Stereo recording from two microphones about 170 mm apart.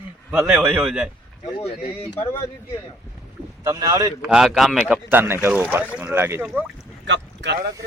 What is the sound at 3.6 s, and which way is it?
Speech, 20° right (ahead or behind).